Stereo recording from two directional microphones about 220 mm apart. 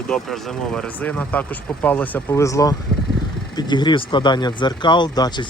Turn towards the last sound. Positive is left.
turn(degrees=20)  # may be behind; listen again after turning